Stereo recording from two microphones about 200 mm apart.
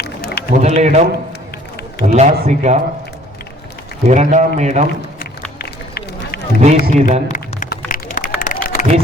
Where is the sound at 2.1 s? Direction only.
35° right (ahead or behind).